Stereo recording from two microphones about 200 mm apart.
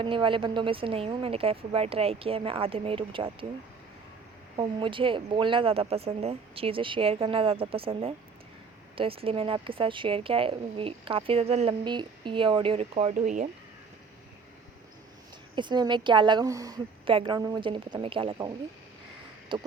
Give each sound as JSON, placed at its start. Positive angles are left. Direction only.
{"t": 0.0, "sound": "a woman's voice", "side_deg": -25}
{"t": 4.5, "sound": "a woman's voice", "side_deg": -25}
{"t": 15.5, "sound": "a woman's voice", "side_deg": -20}